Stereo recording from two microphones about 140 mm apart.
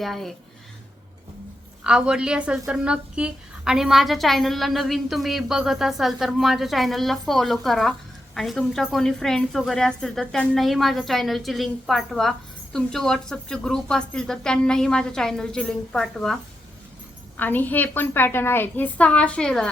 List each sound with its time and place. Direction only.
0.0 s a woman's voice: centre (ahead or behind)
1.8 s a woman's voice: 5° right (ahead or behind)
17.3 s a woman's voice: 15° left (ahead or behind)